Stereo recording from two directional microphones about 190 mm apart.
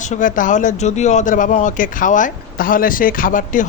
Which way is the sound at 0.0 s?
40° left (ahead or behind).